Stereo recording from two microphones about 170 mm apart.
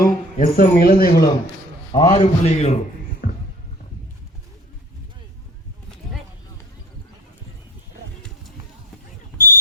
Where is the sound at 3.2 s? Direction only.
55° left (ahead or behind).